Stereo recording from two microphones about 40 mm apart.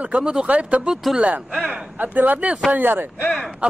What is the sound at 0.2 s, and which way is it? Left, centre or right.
Speech, centre.